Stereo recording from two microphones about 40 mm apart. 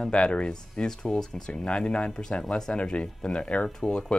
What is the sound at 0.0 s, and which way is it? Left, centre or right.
Speech, left.